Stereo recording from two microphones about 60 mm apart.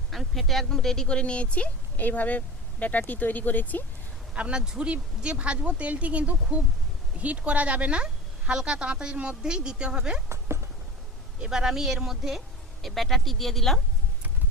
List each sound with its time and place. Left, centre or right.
0.1 s speech: centre; by 3.8 s left
4.4 s speech: centre
10.2 s a sound: right
11.3 s speech: centre